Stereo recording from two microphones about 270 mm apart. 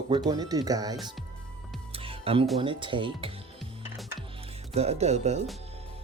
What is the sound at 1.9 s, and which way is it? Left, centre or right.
Music, right.